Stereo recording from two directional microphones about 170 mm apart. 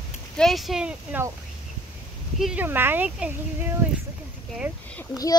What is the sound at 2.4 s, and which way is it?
Speech, 5° right (ahead or behind).